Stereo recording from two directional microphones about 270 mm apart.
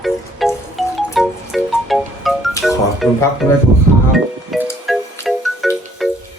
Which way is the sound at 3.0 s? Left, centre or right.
Centre.